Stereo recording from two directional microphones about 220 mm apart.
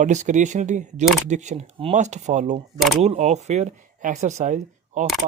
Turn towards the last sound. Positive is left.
turn(degrees=-35)  # may be behind; listen again after turning